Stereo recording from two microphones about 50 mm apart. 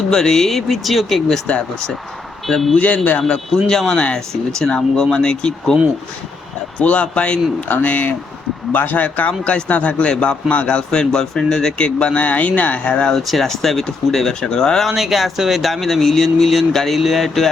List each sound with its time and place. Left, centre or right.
0.1 s speech: centre
2.7 s speech: left
3.2 s speech: centre
6.7 s speech: left
13.1 s speech: centre
14.8 s speech: centre